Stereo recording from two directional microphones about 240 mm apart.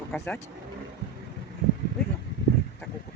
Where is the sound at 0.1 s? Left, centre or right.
Centre.